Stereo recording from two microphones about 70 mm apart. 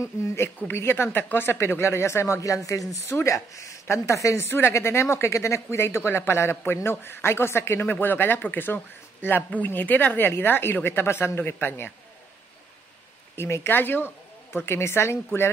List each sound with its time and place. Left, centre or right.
0.6 s speech: left
13.4 s speech: left